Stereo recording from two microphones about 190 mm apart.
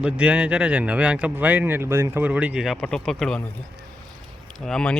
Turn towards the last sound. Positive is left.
turn(degrees=5)  # may be behind; listen again after turning